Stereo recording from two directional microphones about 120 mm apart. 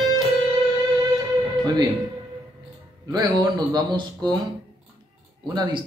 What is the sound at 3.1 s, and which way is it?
Speech, 35° right (ahead or behind).